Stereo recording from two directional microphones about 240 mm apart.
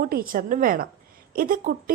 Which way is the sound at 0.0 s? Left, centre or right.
Right.